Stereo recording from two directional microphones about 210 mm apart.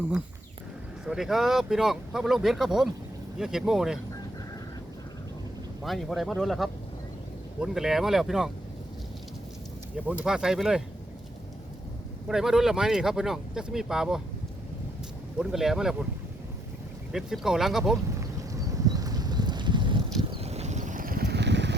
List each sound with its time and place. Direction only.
1.0 s speech: centre (ahead or behind)
5.8 s speech: centre (ahead or behind)
10.1 s speech: 5° right (ahead or behind)
12.3 s speech: centre (ahead or behind)
15.4 s speech: centre (ahead or behind)
17.1 s speech: centre (ahead or behind)
18.2 s clip-clop: 15° right (ahead or behind)
20.3 s vehicle: 30° right (ahead or behind); by 21.8 s 55° right (ahead or behind)